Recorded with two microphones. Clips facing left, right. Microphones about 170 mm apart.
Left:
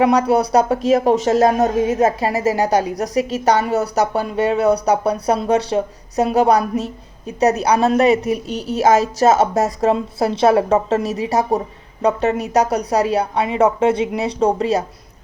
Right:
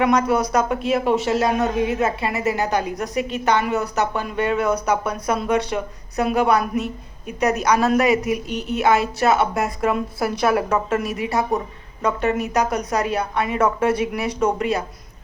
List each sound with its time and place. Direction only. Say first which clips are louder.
0.0 s speech: left 4 dB; 30° left (ahead or behind)
9.9 s a woman's voice: left 4 dB; 25° left (ahead or behind)